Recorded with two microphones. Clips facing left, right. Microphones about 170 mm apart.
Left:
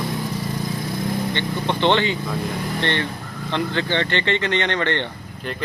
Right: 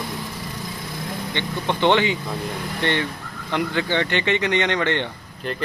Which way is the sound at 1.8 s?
15° right (ahead or behind).